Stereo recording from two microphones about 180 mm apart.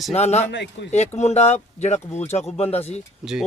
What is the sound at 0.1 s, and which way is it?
Speech, 35° left (ahead or behind).